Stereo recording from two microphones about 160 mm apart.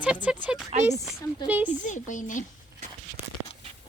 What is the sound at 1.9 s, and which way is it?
Speech, 50° left (ahead or behind).